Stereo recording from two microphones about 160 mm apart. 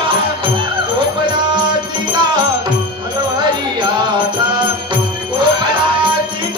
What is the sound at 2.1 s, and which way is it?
Music, 30° right (ahead or behind).